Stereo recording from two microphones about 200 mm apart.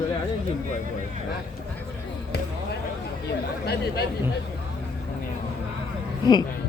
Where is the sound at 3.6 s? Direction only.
55° left (ahead or behind).